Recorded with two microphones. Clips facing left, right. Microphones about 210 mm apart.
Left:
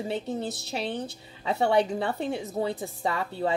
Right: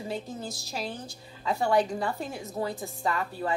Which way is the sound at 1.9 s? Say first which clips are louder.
Left 3 dB; 25° left (ahead or behind).